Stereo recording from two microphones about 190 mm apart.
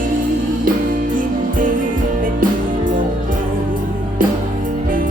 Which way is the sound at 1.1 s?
45° right (ahead or behind).